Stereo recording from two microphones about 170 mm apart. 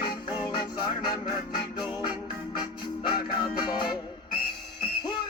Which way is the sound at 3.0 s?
25° left (ahead or behind).